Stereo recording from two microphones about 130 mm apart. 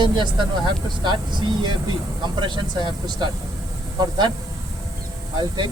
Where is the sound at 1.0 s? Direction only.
35° right (ahead or behind).